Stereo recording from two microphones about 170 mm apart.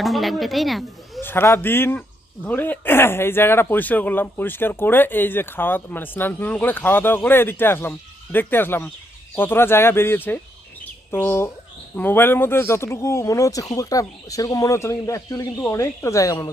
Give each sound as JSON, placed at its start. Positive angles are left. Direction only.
{"t": 0.0, "sound": "speech", "side_deg": 0}
{"t": 1.2, "sound": "a man's voice", "side_deg": 15}